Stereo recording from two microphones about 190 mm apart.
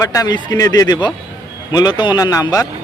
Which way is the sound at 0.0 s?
20° left (ahead or behind).